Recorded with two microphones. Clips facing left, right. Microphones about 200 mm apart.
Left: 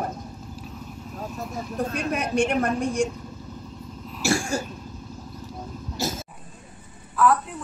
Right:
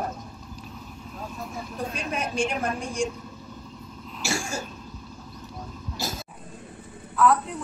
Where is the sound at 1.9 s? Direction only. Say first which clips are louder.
Left 4 dB; 60° left (ahead or behind).